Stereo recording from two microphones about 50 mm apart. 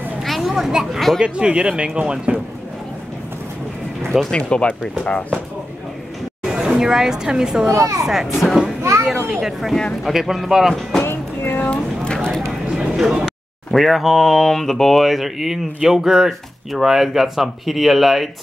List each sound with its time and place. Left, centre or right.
0.2 s children playing: centre
1.2 s speech: right
4.3 s speech: left
6.4 s a woman's voice: centre
7.7 s a child's voice: right
8.0 s speech: centre
10.7 s speech: centre
11.1 s music: left
11.7 s a sound: centre
12.6 s a sound: centre
13.7 s speech: centre